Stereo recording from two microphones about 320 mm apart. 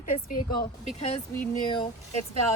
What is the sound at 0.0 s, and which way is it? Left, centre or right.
Speech, left.